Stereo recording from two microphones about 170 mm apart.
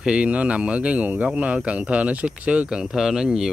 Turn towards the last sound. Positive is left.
turn(degrees=-5)  # may be behind; listen again after turning